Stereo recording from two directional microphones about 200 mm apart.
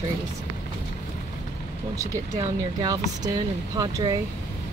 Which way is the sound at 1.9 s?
15° right (ahead or behind).